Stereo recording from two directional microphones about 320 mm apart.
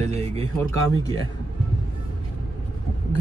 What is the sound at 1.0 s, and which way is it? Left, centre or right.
Speech, centre.